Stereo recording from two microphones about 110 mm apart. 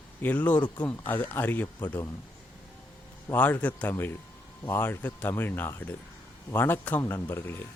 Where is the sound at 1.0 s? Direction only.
20° left (ahead or behind).